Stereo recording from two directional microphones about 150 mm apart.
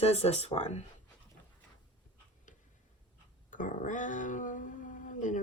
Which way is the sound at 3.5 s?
60° left (ahead or behind).